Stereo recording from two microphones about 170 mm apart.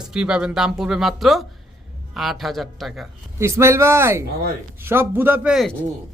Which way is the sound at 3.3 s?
15° right (ahead or behind).